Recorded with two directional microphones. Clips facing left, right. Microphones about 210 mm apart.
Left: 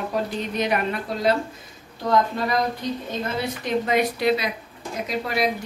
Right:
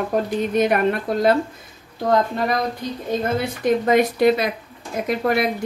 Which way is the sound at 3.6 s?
45° right (ahead or behind).